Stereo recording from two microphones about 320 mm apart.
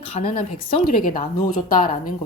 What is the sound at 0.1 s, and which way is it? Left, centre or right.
A woman's voice, centre.